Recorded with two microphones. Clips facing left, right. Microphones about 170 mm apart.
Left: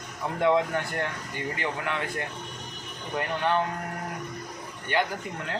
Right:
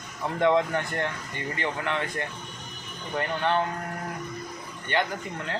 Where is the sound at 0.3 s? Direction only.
5° left (ahead or behind).